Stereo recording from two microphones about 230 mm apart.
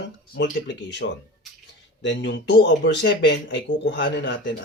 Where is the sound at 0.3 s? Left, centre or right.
Left.